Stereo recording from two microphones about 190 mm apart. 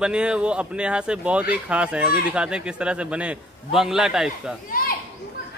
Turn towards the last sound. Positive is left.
turn(degrees=50)  # may be behind; listen again after turning